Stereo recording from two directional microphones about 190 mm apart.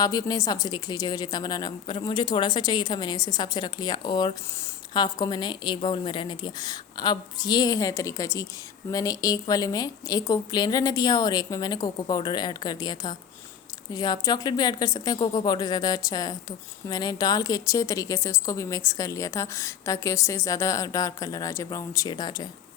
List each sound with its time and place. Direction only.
0.0 s a woman's voice: 20° left (ahead or behind)